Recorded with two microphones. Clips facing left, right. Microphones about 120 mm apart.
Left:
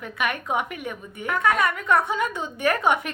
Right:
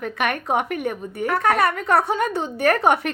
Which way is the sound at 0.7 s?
40° right (ahead or behind).